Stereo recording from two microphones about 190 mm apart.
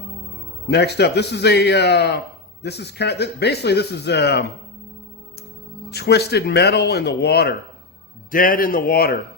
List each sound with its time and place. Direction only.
0.7 s speech: 60° left (ahead or behind)
5.9 s speech: 60° left (ahead or behind)
8.3 s speech: 45° left (ahead or behind)